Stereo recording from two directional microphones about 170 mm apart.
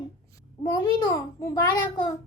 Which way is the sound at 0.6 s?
20° left (ahead or behind).